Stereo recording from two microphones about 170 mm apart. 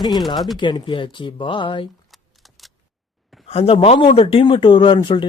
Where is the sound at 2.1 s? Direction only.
Centre (ahead or behind).